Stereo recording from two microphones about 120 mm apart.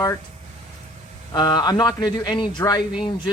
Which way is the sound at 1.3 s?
35° left (ahead or behind).